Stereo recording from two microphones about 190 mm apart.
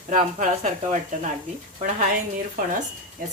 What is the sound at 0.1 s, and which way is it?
Speech, 45° right (ahead or behind).